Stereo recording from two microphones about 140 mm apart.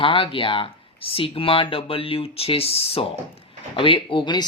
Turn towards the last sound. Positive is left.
turn(degrees=35)  # may be behind; listen again after turning